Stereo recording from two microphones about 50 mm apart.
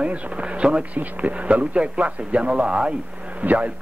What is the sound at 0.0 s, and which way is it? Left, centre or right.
A man's voice, right.